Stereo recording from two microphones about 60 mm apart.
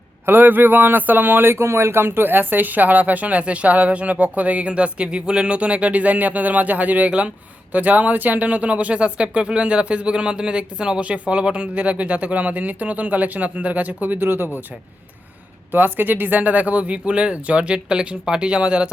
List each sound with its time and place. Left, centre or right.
0.3 s speech: right
15.7 s speech: right